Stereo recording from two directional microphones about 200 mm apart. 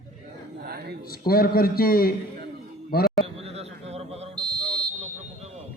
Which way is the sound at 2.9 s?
50° left (ahead or behind).